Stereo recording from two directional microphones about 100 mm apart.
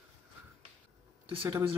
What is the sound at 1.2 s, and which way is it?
Speech, 20° right (ahead or behind).